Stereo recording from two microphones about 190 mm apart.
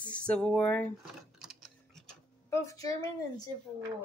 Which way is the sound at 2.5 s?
20° left (ahead or behind).